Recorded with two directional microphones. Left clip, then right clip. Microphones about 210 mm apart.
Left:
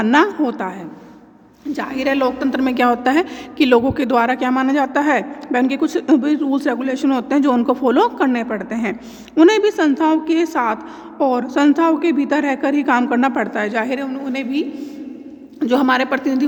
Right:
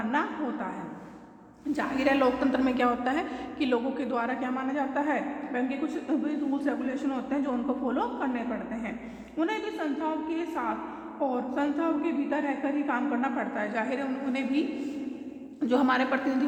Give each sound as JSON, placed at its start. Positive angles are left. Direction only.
{"t": 0.0, "sound": "a woman's voice", "side_deg": 50}
{"t": 1.7, "sound": "a woman's voice", "side_deg": 50}
{"t": 15.6, "sound": "a woman's voice", "side_deg": 50}